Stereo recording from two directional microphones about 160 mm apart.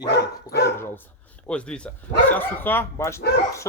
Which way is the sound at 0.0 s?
90° left.